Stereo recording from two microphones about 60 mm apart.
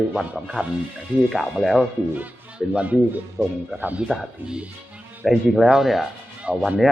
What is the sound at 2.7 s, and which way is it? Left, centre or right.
Speech, right.